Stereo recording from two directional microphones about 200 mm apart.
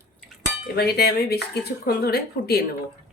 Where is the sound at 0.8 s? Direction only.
50° left (ahead or behind).